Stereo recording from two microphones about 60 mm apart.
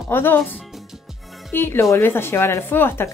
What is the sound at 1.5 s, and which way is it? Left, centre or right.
Speech, left.